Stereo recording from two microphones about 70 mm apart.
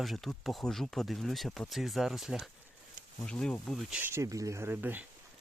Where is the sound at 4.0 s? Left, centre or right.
Right.